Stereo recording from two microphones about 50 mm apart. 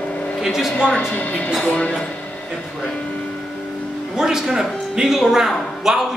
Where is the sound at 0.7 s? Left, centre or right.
Centre.